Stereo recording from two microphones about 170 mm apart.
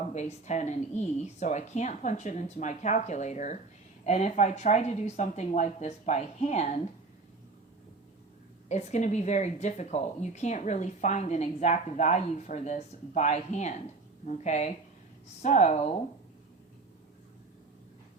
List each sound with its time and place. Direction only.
0.1 s speech: 40° left (ahead or behind)
8.7 s speech: 45° left (ahead or behind)